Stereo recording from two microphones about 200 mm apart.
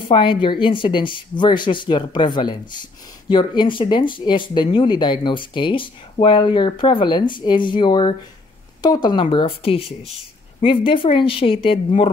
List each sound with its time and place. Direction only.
0.0 s speech: 25° left (ahead or behind)